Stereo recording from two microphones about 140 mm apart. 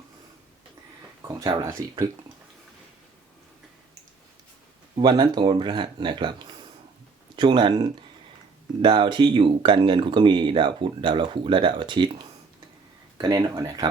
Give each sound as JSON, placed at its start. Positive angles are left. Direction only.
{"t": 1.4, "sound": "speech", "side_deg": -30}
{"t": 4.9, "sound": "speech", "side_deg": -35}
{"t": 7.3, "sound": "speech", "side_deg": -35}